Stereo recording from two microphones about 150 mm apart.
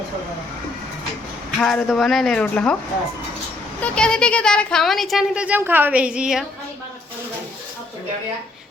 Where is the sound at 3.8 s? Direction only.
5° left (ahead or behind).